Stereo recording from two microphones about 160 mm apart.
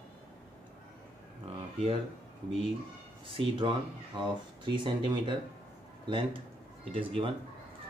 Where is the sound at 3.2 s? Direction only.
35° right (ahead or behind).